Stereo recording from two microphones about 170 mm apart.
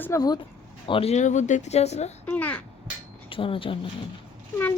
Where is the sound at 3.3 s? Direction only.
30° left (ahead or behind).